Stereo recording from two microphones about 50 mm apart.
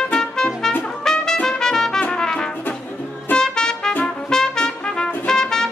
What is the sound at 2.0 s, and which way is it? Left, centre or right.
Music, left.